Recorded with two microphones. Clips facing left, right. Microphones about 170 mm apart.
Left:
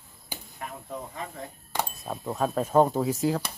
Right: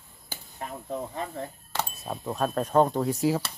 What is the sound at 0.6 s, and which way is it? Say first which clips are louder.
Chop: right 2 dB; 35° right (ahead or behind).